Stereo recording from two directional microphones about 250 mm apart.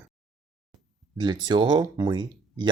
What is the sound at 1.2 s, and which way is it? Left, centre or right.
Speech, centre.